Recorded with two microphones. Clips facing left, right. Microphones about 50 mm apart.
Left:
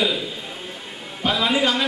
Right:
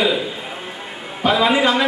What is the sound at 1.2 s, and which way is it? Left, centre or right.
Speech, centre.